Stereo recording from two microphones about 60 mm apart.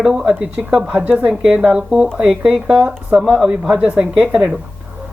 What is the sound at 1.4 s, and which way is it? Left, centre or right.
Speech, centre.